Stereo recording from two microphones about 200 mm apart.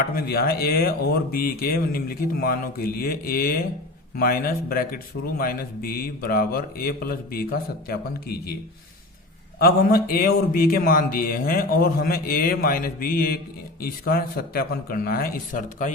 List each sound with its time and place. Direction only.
0.2 s a man's voice: 50° left (ahead or behind)
9.6 s a man's voice: 50° left (ahead or behind)